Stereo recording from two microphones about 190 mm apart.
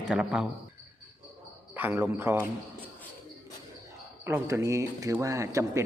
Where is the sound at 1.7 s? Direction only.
10° right (ahead or behind).